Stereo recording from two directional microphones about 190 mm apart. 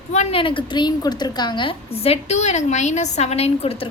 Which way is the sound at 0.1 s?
35° left (ahead or behind).